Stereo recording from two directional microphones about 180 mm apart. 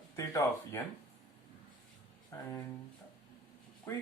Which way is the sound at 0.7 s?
10° left (ahead or behind).